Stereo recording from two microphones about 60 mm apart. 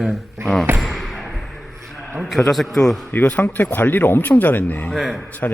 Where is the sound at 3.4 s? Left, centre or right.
Left.